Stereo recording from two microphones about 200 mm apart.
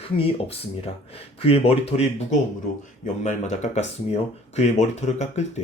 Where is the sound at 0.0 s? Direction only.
30° left (ahead or behind).